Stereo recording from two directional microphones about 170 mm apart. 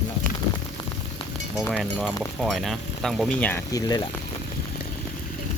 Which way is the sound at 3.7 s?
20° left (ahead or behind).